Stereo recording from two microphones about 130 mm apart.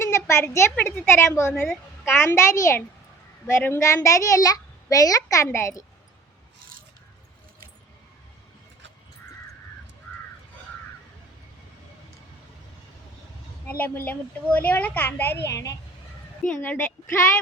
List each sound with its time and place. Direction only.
0.0 s a child's voice: 20° left (ahead or behind)
13.7 s a child's voice: 15° left (ahead or behind)